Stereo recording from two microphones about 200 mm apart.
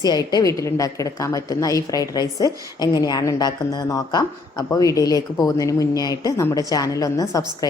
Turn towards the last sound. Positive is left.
turn(degrees=15)  # may be behind; listen again after turning